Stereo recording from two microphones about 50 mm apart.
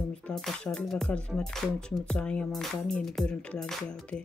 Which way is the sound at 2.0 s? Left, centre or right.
Left.